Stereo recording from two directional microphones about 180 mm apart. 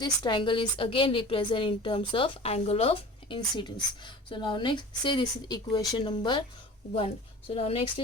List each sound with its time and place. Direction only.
0.0 s a woman's voice: 25° left (ahead or behind)